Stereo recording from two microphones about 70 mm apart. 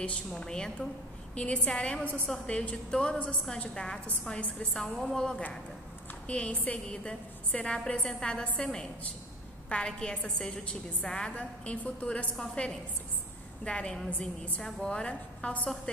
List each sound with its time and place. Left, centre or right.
0.0 s a woman's voice: centre
4.4 s a woman's voice: centre